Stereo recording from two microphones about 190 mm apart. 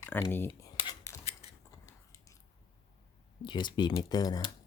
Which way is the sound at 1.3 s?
35° left (ahead or behind).